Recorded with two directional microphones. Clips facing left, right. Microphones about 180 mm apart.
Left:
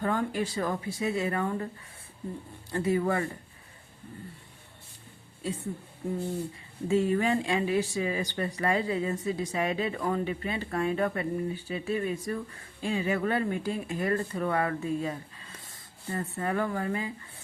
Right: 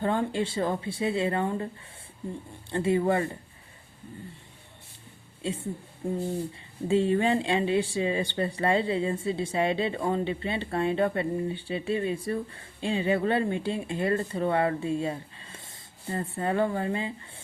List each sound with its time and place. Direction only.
0.0 s speech: 25° right (ahead or behind)
2.6 s speech: 25° right (ahead or behind)
6.0 s speech: 30° right (ahead or behind)